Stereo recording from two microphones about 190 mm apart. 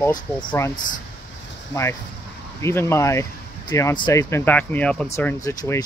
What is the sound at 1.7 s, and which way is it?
Speech, 15° left (ahead or behind).